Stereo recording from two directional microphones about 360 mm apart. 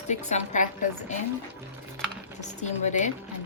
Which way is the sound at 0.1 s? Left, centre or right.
Centre.